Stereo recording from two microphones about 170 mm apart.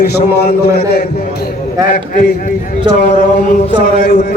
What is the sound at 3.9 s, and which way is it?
Speech, 70° left (ahead or behind).